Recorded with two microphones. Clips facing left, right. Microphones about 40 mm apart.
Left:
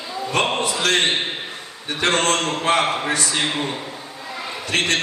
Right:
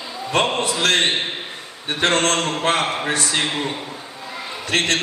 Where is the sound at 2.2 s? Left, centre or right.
Right.